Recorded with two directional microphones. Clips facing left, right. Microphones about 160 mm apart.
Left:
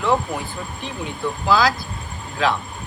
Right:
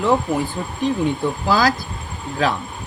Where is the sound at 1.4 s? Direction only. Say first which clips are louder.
Even; 45° right (ahead or behind).